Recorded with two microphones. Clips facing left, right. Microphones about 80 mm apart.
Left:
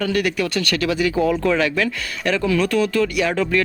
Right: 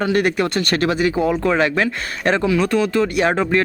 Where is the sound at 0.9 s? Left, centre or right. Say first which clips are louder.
Left 2 dB; right.